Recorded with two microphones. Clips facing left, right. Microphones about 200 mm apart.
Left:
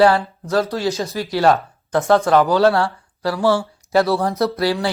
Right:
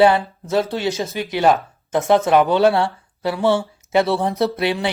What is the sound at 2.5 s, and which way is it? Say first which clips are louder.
Speech: even; 20° right (ahead or behind).